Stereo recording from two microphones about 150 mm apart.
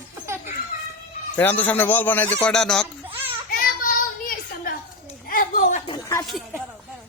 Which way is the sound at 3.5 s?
65° left (ahead or behind).